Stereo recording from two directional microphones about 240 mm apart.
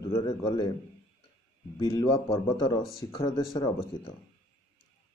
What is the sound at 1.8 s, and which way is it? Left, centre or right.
Speech, centre.